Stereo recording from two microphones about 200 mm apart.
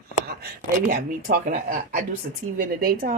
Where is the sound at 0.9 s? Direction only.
40° right (ahead or behind).